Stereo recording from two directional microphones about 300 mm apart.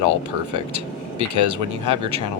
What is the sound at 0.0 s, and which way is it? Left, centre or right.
Speech, right.